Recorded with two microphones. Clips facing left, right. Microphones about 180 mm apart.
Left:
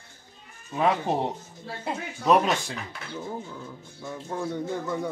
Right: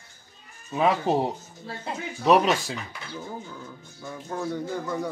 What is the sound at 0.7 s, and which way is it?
Speech, 5° right (ahead or behind).